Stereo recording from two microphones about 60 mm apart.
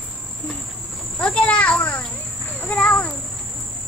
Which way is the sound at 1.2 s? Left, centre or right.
Centre.